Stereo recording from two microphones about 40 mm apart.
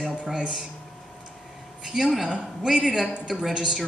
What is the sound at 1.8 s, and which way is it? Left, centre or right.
Speech, centre.